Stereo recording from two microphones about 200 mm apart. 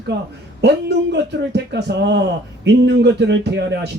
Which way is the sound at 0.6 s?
55° right (ahead or behind).